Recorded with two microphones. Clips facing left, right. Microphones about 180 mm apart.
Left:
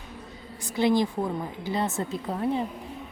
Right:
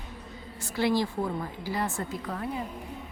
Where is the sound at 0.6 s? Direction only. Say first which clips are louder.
Left 3 dB; 20° left (ahead or behind).